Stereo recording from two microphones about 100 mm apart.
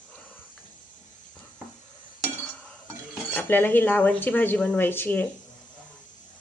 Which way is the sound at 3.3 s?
20° left (ahead or behind).